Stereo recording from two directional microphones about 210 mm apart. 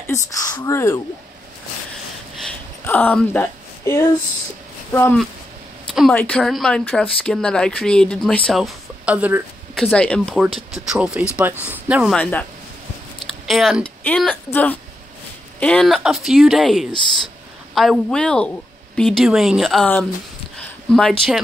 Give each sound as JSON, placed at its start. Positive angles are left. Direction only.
{"t": 0.1, "sound": "speech", "side_deg": 15}
{"t": 2.4, "sound": "a sound", "side_deg": 10}
{"t": 4.9, "sound": "speech", "side_deg": 10}
{"t": 9.8, "sound": "speech", "side_deg": 5}
{"t": 12.2, "sound": "speech", "side_deg": 10}
{"t": 13.5, "sound": "speech", "side_deg": 0}